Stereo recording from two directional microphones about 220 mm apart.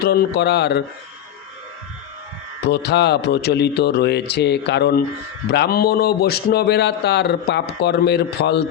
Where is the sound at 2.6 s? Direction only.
50° left (ahead or behind).